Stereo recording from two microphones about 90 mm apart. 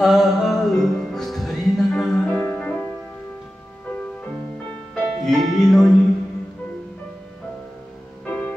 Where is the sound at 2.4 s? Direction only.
20° left (ahead or behind).